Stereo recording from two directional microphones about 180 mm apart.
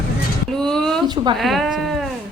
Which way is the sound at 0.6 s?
5° left (ahead or behind).